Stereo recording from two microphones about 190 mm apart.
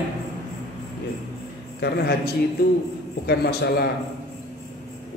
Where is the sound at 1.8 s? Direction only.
55° left (ahead or behind).